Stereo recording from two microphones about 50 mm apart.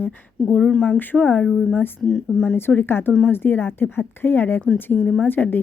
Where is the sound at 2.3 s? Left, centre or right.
Centre.